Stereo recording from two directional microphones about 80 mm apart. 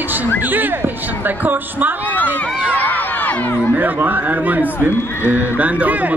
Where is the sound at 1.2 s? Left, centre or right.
Right.